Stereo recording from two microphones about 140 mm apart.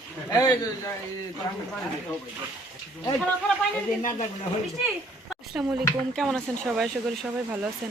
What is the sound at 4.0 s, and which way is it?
Speech, 65° left (ahead or behind).